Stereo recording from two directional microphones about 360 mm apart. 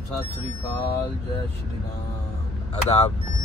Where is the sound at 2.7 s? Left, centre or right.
Centre.